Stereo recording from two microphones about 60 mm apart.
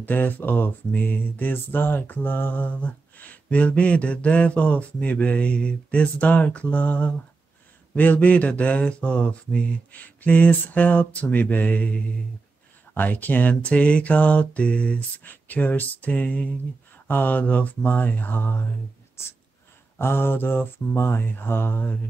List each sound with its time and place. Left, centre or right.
0.0 s speech: left
17.1 s mantra: left
19.2 s speech: left
20.0 s mantra: left